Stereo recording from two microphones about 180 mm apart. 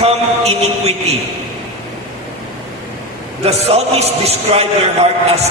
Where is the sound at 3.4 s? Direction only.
35° right (ahead or behind).